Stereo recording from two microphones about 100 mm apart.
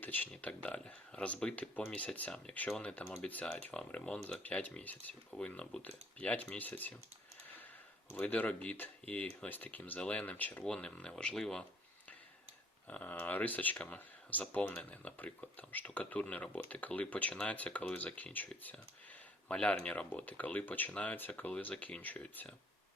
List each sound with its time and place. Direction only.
0.0 s speech: 15° left (ahead or behind)
8.1 s speech: 15° left (ahead or behind)
12.9 s speech: 15° left (ahead or behind)